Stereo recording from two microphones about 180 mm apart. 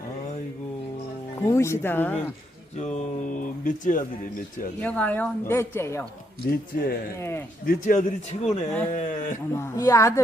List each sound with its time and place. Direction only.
1.4 s a woman's voice: 15° left (ahead or behind)
2.7 s speech: 40° left (ahead or behind)
4.8 s a woman's voice: 10° left (ahead or behind)
6.4 s speech: 55° left (ahead or behind)
7.2 s a woman's voice: 15° left (ahead or behind)
7.6 s speech: 50° left (ahead or behind)
8.4 s a woman's voice: 10° left (ahead or behind)
8.9 s speech: 45° left (ahead or behind)
9.5 s a woman's voice: 15° left (ahead or behind)